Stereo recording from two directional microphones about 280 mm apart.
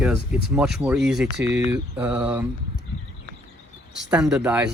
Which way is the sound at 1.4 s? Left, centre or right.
Right.